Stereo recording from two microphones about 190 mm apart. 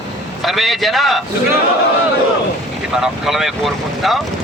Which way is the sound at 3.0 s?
Centre (ahead or behind).